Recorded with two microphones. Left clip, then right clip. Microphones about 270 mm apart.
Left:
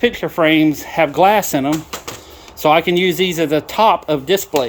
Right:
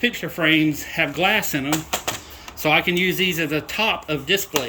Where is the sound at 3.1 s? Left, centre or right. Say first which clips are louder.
Left 5 dB; left.